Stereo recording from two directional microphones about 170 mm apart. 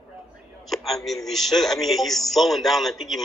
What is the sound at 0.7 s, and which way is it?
A man's voice, centre (ahead or behind).